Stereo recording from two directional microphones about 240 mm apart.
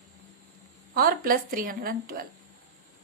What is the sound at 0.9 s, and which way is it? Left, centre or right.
A woman's voice, right.